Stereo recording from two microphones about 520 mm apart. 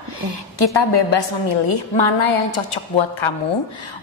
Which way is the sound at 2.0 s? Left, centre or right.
Left.